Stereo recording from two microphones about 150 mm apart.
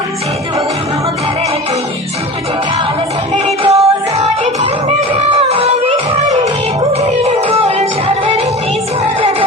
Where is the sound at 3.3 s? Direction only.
40° right (ahead or behind).